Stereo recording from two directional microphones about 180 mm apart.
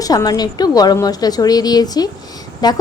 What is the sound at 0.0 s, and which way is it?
A woman's voice, 20° left (ahead or behind).